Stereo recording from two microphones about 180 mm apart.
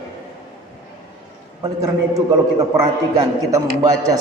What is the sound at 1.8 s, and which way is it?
A man's voice, 20° right (ahead or behind).